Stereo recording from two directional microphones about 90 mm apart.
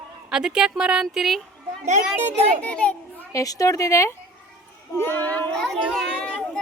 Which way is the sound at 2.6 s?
15° left (ahead or behind).